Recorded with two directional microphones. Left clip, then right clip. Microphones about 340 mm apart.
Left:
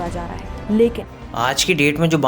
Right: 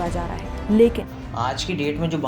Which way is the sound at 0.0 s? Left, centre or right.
Centre.